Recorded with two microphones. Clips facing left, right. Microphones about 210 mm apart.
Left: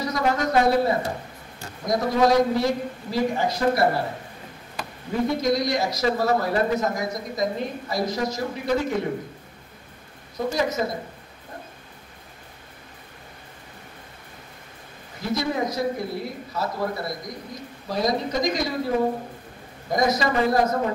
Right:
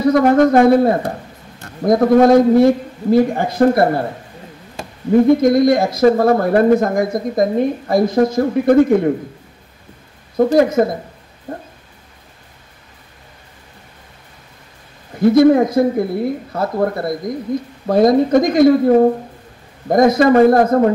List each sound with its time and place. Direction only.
0.0 s speech: 55° right (ahead or behind)
4.8 s a sound: 25° right (ahead or behind)
5.1 s speech: 55° right (ahead or behind)
10.3 s speech: 55° right (ahead or behind)
15.1 s speech: 55° right (ahead or behind)
19.9 s speech: 55° right (ahead or behind)